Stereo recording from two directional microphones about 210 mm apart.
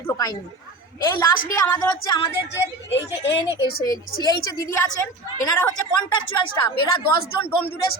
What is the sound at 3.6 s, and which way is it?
Speech, 45° left (ahead or behind).